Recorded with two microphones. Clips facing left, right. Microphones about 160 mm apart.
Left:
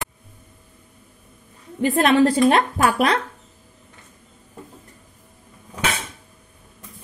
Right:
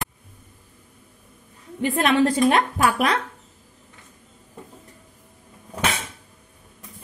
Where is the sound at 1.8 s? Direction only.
35° left (ahead or behind).